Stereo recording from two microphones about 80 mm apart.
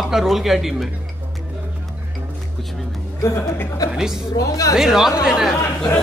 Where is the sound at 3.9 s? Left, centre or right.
Centre.